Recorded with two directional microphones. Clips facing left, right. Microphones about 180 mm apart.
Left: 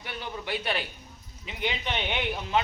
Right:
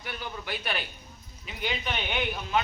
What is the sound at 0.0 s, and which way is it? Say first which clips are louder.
A man's voice: left 1 dB; 25° left (ahead or behind).